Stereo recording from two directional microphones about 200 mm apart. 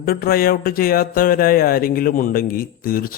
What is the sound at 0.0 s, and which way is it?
Speech, 45° left (ahead or behind).